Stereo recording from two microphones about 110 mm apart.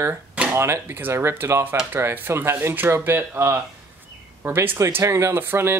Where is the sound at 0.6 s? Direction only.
20° right (ahead or behind).